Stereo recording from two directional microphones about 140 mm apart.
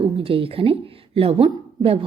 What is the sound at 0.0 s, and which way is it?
A woman's voice, 40° right (ahead or behind).